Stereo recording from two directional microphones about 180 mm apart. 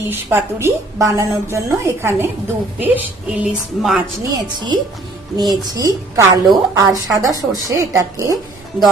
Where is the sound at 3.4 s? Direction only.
5° right (ahead or behind).